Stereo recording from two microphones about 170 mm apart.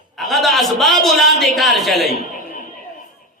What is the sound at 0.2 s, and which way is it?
A man's voice, centre (ahead or behind).